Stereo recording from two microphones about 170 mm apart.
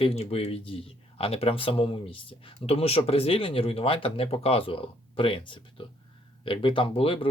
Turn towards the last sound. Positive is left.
turn(degrees=35)  # may be behind; listen again after turning